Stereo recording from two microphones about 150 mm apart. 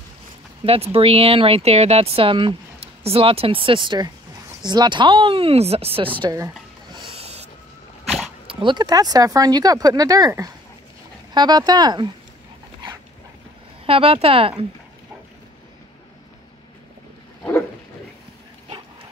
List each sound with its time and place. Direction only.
0.7 s speech: 40° right (ahead or behind)
6.2 s a sound: 25° right (ahead or behind)
8.0 s dog: centre (ahead or behind)
8.5 s speech: 35° right (ahead or behind)
13.8 s speech: 40° right (ahead or behind)